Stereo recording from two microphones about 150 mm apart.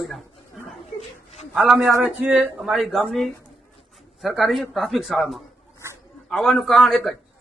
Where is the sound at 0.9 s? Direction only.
45° left (ahead or behind).